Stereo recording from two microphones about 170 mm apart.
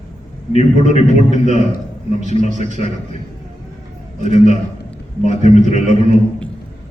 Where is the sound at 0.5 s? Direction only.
40° left (ahead or behind).